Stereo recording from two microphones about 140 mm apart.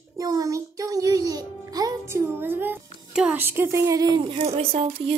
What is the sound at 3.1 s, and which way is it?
Speech, 5° right (ahead or behind).